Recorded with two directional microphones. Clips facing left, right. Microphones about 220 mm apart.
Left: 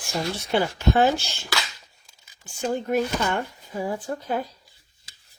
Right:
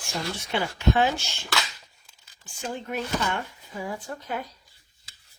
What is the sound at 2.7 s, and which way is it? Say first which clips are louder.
Speech: left 6 dB; 45° left (ahead or behind).